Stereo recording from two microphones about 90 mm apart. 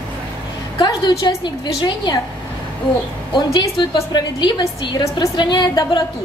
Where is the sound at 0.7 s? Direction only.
55° left (ahead or behind).